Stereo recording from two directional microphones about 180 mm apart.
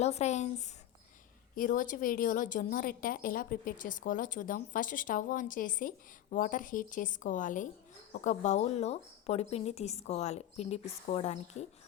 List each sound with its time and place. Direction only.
0.0 s a woman's voice: 40° left (ahead or behind)